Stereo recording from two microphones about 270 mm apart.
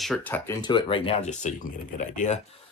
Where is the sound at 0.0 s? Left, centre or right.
Centre; by 2.4 s left.